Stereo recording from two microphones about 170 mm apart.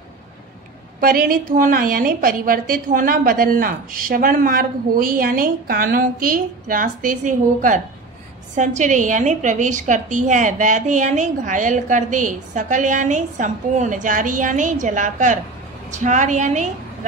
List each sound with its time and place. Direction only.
1.0 s a woman's voice: 55° right (ahead or behind)